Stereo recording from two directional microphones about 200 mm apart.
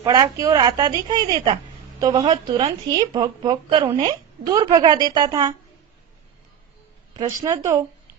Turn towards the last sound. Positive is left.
turn(degrees=-15)  # may be behind; listen again after turning